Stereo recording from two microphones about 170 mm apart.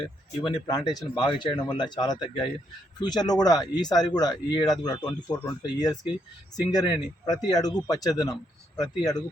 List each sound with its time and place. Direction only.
0.4 s speech: 25° left (ahead or behind)